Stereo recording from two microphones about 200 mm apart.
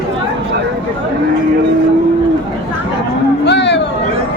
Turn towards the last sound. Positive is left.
turn(degrees=60)  # may be behind; listen again after turning